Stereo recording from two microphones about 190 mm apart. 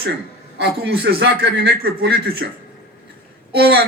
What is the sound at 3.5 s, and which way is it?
Speech, 60° right (ahead or behind).